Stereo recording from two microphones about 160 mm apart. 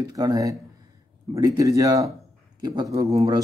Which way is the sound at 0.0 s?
25° right (ahead or behind).